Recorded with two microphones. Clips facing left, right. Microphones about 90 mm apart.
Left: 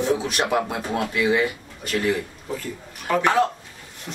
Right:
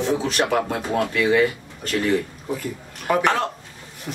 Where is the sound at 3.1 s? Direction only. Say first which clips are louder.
Right 2 dB; 10° right (ahead or behind).